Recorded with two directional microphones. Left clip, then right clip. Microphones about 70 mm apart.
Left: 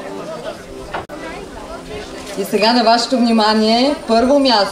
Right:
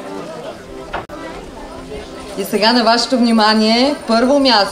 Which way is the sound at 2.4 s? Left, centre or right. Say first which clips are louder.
Even; right.